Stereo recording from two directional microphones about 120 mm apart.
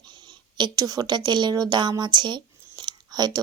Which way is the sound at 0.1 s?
40° right (ahead or behind).